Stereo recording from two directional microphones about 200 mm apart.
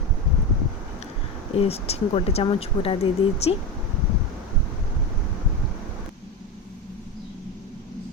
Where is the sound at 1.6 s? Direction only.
30° left (ahead or behind).